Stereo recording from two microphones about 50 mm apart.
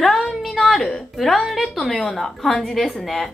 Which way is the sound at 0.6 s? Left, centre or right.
Centre.